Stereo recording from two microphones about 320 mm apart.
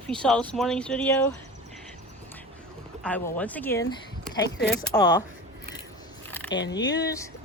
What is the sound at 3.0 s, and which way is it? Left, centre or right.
A woman's voice, centre.